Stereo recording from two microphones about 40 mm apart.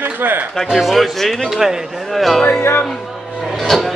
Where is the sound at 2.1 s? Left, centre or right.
Centre.